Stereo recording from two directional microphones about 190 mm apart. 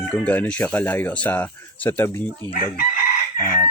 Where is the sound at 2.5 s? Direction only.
45° left (ahead or behind).